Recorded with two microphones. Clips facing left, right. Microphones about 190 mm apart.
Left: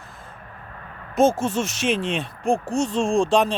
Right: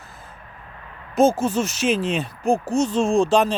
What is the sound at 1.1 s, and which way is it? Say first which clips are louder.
Speech: right 1 dB; centre (ahead or behind).